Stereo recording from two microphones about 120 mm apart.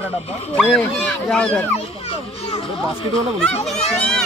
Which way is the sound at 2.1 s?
55° left (ahead or behind).